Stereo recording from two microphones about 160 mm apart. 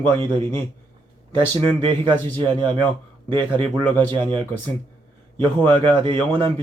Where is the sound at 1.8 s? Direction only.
30° right (ahead or behind).